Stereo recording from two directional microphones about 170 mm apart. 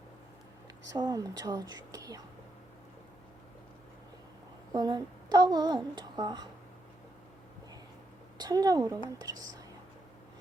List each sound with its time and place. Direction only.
0.9 s speech: 20° right (ahead or behind)
4.7 s speech: 25° right (ahead or behind)
8.4 s speech: 20° right (ahead or behind)